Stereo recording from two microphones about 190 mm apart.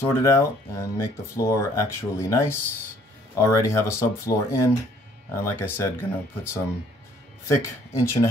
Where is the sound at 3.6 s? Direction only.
15° left (ahead or behind).